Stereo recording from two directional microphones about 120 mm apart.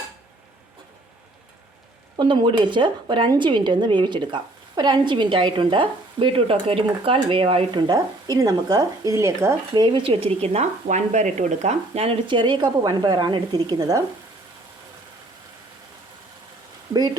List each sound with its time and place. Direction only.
2.1 s a woman's voice: 40° right (ahead or behind)
7.8 s a woman's voice: 35° right (ahead or behind)
9.7 s speech: 40° right (ahead or behind); by 12.0 s 75° right (ahead or behind)
12.0 s a woman's voice: 40° right (ahead or behind)